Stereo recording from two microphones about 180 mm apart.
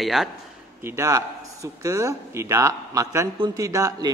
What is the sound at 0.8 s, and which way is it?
A man's voice, 15° right (ahead or behind).